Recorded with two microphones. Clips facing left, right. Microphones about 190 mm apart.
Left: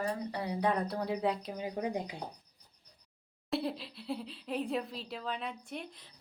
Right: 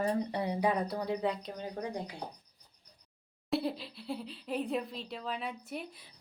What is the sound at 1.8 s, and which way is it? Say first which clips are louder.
Speech: left 3 dB; 20° left (ahead or behind).